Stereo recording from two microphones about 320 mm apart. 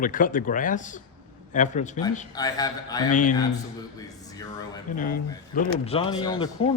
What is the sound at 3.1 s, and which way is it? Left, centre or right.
Speech, left.